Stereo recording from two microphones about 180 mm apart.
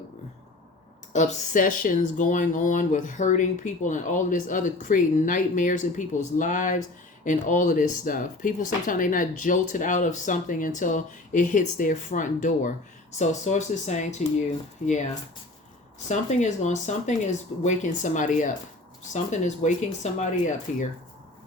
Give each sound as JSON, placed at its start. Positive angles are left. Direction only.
{"t": 1.1, "sound": "speech", "side_deg": 40}
{"t": 16.0, "sound": "speech", "side_deg": 40}